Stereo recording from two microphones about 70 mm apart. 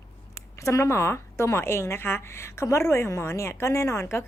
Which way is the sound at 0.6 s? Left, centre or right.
Left.